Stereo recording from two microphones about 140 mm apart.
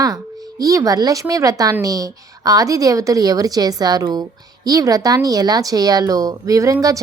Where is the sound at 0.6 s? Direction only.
25° right (ahead or behind).